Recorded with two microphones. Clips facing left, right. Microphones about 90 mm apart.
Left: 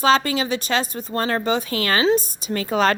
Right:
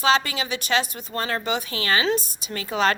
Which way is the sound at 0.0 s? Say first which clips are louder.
Left 3 dB; 40° left (ahead or behind).